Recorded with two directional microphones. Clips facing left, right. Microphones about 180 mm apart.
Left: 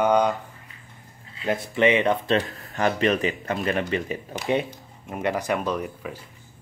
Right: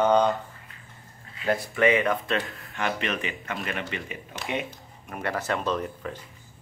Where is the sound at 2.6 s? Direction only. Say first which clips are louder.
Left 6 dB; 40° left (ahead or behind).